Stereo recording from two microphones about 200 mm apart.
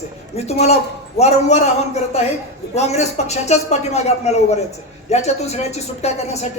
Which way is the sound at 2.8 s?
35° left (ahead or behind).